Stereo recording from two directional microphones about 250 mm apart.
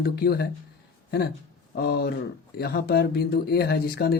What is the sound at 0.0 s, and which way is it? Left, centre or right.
Speech, left.